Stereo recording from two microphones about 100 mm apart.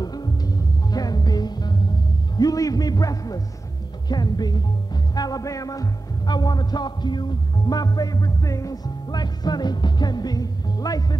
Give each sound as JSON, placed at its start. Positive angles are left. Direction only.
{"t": 0.0, "sound": "music", "side_deg": 40}
{"t": 4.1, "sound": "speech", "side_deg": 45}
{"t": 5.1, "sound": "music", "side_deg": 40}